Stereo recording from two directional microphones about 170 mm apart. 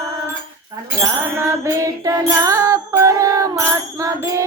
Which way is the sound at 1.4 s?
15° right (ahead or behind).